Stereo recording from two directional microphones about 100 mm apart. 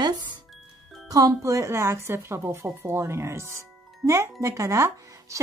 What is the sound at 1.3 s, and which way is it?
A woman's voice, 30° right (ahead or behind).